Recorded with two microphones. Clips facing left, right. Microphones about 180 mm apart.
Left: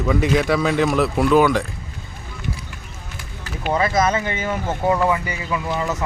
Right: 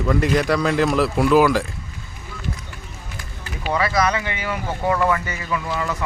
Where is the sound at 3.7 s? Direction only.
25° left (ahead or behind).